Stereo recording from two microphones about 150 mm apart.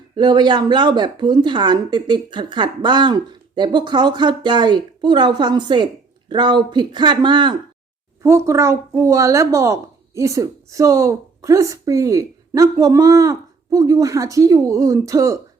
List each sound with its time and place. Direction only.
0.2 s a woman's voice: 30° right (ahead or behind)
8.2 s a woman's voice: 20° right (ahead or behind)